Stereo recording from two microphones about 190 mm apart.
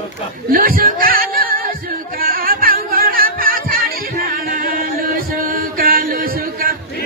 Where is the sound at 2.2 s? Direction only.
50° right (ahead or behind).